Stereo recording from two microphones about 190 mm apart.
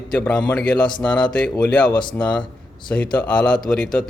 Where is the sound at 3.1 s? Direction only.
5° left (ahead or behind).